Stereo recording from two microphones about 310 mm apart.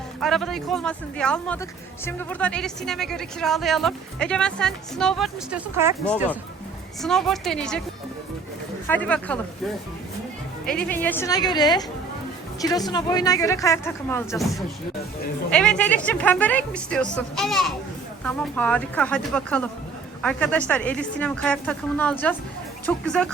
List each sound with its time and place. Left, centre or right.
0.2 s speech: centre
7.0 s speech: centre
8.9 s speech: centre
10.7 s speech: centre